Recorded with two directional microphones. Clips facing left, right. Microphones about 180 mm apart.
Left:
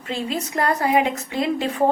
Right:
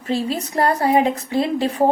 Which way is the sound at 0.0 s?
35° right (ahead or behind).